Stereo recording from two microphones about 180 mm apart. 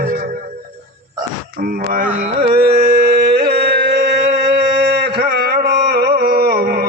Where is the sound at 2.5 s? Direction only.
60° right (ahead or behind).